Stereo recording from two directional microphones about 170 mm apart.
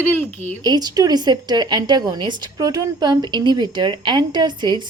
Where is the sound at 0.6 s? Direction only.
25° right (ahead or behind).